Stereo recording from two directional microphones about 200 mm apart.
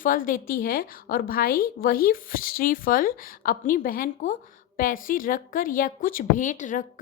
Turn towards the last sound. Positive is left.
turn(degrees=40)  # may be behind; listen again after turning